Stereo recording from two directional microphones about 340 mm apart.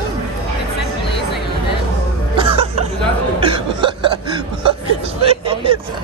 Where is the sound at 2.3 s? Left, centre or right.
Centre.